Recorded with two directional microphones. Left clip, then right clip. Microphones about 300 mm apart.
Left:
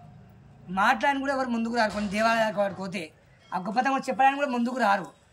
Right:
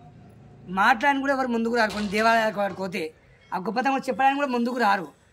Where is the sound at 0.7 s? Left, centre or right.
Centre.